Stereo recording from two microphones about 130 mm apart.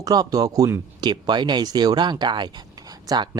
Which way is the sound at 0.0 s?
30° right (ahead or behind).